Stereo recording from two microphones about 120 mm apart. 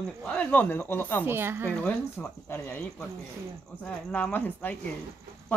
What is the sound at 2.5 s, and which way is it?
Speech, 15° left (ahead or behind).